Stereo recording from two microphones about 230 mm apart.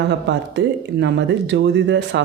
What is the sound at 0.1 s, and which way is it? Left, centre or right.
Speech, right.